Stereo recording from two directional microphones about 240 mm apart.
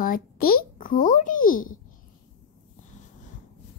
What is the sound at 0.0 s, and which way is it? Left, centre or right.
A child's voice, left.